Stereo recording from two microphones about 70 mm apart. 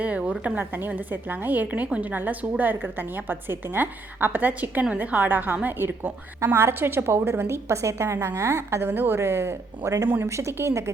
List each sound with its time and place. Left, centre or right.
0.0 s a woman's voice: centre
6.4 s a woman's voice: right